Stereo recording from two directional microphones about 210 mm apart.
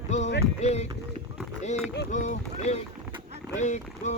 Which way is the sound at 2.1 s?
35° left (ahead or behind).